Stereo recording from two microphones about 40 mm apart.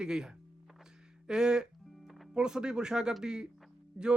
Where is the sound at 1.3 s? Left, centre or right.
Centre.